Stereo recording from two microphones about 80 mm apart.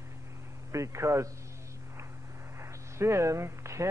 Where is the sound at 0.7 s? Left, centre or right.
Right.